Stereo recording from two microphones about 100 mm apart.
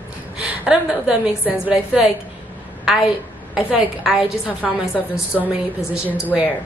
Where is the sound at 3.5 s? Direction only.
5° right (ahead or behind).